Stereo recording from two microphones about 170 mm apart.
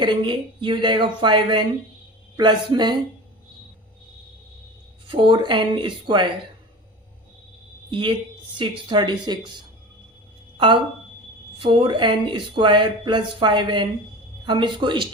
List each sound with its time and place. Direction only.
0.0 s speech: 25° right (ahead or behind)
5.0 s speech: 30° right (ahead or behind)
7.9 s a woman's voice: 30° right (ahead or behind)
11.6 s speech: 30° right (ahead or behind)